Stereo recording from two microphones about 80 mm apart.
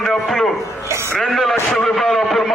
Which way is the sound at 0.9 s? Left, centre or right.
Right.